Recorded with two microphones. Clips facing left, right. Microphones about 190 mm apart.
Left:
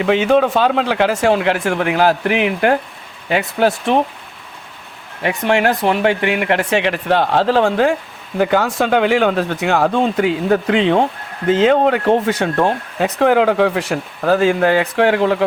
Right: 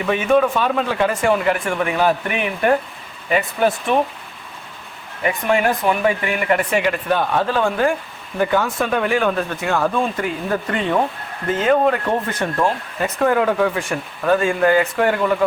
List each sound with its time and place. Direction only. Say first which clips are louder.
0.0 s speech: left 3 dB; 90° left
5.2 s speech: left 2 dB; 75° left (ahead or behind)
12.2 s speech: left 5 dB; 80° left
13.0 s speech: left 4 dB; 90° left